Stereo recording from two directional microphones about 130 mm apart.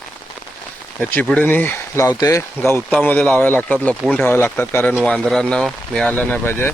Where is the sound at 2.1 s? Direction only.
25° left (ahead or behind).